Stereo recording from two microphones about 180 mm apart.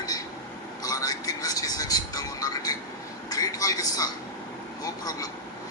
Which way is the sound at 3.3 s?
20° left (ahead or behind).